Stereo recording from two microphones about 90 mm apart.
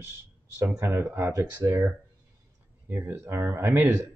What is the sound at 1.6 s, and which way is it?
Speech, 35° right (ahead or behind).